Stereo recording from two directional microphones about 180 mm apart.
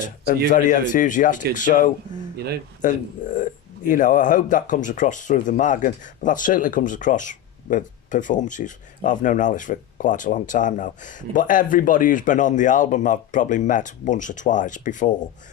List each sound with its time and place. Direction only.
0.5 s speech: 45° left (ahead or behind)
2.3 s speech: 60° right (ahead or behind)
2.8 s speech: 45° left (ahead or behind)